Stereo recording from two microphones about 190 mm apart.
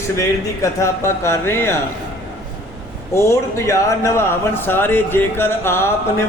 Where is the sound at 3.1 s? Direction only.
15° left (ahead or behind).